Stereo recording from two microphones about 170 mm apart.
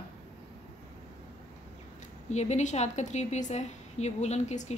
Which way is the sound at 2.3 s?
40° left (ahead or behind).